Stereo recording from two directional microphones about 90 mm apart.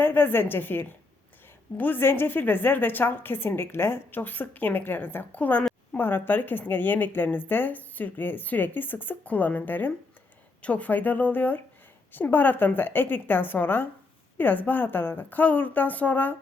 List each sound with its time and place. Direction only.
0.0 s a woman's voice: 20° left (ahead or behind)